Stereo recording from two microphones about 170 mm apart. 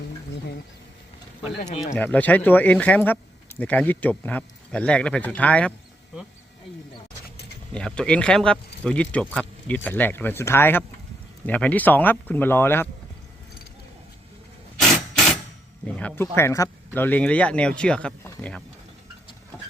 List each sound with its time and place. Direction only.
1.6 s speech: 40° left (ahead or behind)
2.0 s speech: 10° left (ahead or behind)
7.7 s speech: 5° left (ahead or behind)
16.0 s speech: 10° left (ahead or behind)